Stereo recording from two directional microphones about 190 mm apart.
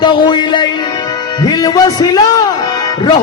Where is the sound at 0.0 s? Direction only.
25° left (ahead or behind).